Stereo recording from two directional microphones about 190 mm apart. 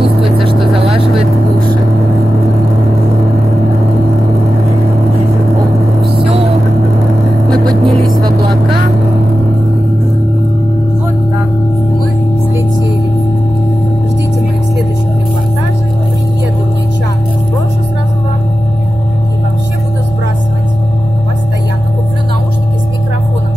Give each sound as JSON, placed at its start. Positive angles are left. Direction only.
{"t": 0.2, "sound": "vehicle", "side_deg": -30}
{"t": 7.4, "sound": "vehicle", "side_deg": -20}